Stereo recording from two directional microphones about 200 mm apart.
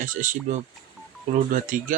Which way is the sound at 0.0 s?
40° right (ahead or behind).